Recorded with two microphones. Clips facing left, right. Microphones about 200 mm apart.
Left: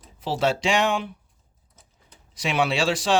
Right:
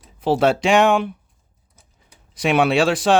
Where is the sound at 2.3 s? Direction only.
55° right (ahead or behind).